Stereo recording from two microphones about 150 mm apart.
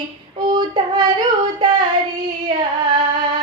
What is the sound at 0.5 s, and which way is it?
Child singing, 30° right (ahead or behind).